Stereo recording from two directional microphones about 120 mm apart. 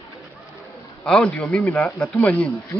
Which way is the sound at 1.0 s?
10° left (ahead or behind).